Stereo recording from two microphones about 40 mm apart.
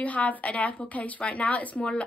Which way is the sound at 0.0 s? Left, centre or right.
Left.